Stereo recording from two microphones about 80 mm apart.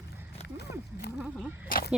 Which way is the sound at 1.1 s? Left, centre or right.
Centre.